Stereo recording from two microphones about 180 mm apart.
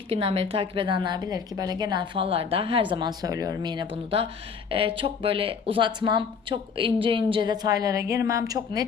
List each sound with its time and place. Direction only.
0.1 s speech: 35° right (ahead or behind)